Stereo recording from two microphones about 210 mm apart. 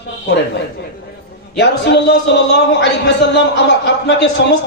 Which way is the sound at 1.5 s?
55° left (ahead or behind).